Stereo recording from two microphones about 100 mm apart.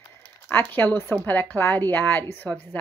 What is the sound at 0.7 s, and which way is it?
A woman's voice, 20° left (ahead or behind).